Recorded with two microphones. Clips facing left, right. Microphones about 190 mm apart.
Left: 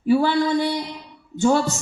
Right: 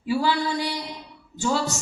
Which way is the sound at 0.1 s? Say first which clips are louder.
Left 6 dB; 55° left (ahead or behind).